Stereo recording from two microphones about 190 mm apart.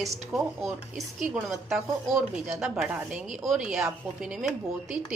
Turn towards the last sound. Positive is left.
turn(degrees=0)  # may be behind; listen again after turning